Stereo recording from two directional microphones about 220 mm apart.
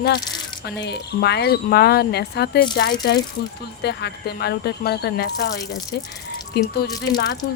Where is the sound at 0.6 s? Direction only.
50° left (ahead or behind).